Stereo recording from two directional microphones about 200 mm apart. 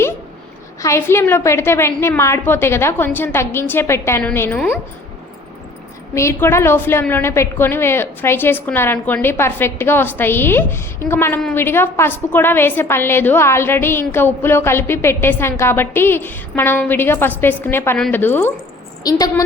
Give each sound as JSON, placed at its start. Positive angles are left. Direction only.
{"t": 0.8, "sound": "a woman's voice", "side_deg": 15}
{"t": 6.1, "sound": "a woman's voice", "side_deg": 15}